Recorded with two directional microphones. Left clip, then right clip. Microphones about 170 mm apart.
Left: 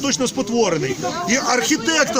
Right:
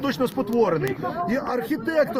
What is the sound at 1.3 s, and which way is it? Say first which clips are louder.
Speech: left 10 dB; 30° left (ahead or behind).